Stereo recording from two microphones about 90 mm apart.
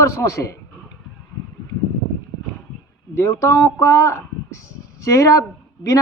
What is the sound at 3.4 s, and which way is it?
Speech, 30° left (ahead or behind).